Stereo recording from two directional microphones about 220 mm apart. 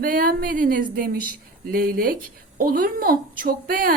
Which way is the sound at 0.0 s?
40° right (ahead or behind).